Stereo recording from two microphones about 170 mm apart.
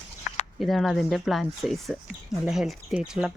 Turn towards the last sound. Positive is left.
turn(degrees=-5)  # may be behind; listen again after turning